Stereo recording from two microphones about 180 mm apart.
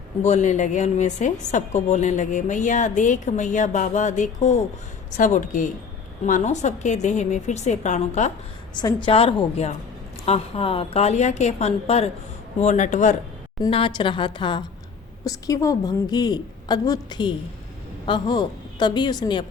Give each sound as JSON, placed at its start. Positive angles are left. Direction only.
{"t": 0.2, "sound": "a woman's voice", "side_deg": 40}
{"t": 8.7, "sound": "a woman's voice", "side_deg": 25}
{"t": 13.6, "sound": "a woman's voice", "side_deg": 30}